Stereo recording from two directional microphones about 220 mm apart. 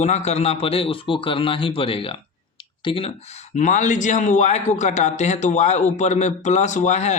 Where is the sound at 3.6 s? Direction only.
35° left (ahead or behind).